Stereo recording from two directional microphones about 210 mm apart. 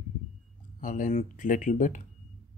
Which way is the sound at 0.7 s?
40° left (ahead or behind).